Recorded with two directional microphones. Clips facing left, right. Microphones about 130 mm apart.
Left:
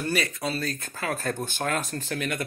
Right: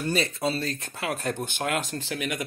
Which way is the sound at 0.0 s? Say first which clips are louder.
Right 2 dB; 25° right (ahead or behind).